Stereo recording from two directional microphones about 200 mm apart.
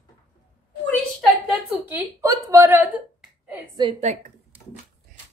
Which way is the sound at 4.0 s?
35° right (ahead or behind).